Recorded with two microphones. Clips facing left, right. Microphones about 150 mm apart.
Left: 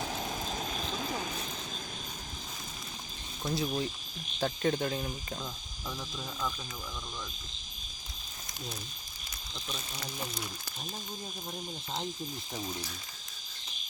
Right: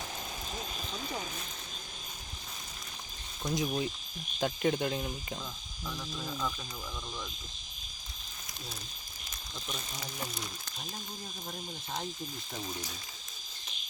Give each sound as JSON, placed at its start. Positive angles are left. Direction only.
{"t": 3.5, "sound": "speech", "side_deg": -15}
{"t": 4.9, "sound": "cricket", "side_deg": -5}